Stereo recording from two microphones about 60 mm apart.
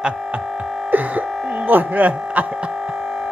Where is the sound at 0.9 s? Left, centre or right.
Right.